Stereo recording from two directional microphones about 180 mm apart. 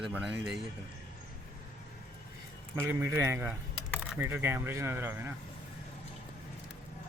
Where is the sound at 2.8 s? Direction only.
10° right (ahead or behind).